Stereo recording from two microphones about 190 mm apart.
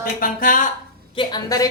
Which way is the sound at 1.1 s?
20° left (ahead or behind).